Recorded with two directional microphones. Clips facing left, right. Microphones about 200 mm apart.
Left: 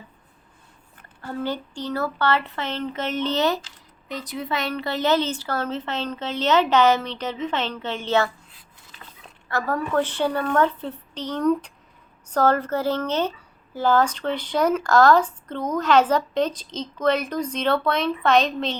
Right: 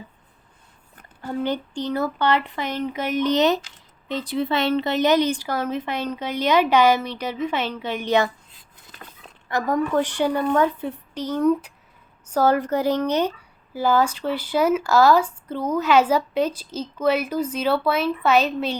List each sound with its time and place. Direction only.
1.2 s speech: 15° right (ahead or behind)
4.1 s speech: 30° right (ahead or behind)
9.5 s speech: 15° right (ahead or behind)